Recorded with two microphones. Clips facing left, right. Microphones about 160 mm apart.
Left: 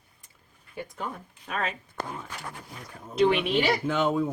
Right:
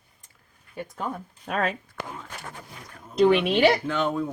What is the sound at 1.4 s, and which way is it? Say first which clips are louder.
Speech: right 5 dB; 60° right (ahead or behind).